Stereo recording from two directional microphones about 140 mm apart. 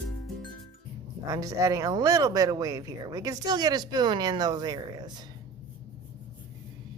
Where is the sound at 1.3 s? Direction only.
25° right (ahead or behind).